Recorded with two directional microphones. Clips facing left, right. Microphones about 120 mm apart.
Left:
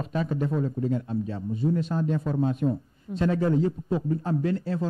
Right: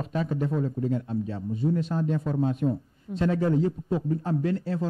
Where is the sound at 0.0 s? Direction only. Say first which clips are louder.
Even; 20° left (ahead or behind).